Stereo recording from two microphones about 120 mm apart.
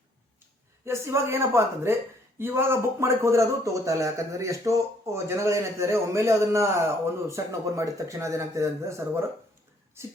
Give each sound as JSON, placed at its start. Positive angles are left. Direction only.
{"t": 0.9, "sound": "speech", "side_deg": -25}